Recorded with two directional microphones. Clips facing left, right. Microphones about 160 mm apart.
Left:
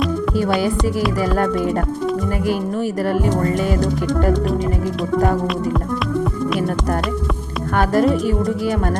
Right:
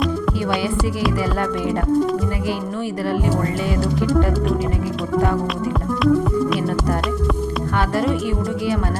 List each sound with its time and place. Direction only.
7.8 s speech: 45° left (ahead or behind)